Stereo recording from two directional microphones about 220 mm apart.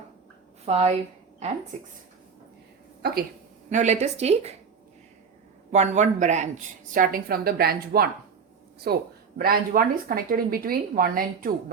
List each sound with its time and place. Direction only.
0.6 s a woman's voice: 30° right (ahead or behind)
3.7 s a woman's voice: 35° right (ahead or behind)
5.7 s a woman's voice: 30° right (ahead or behind)